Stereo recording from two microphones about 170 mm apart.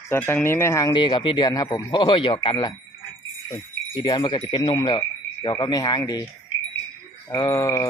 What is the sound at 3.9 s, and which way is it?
Speech, 25° left (ahead or behind).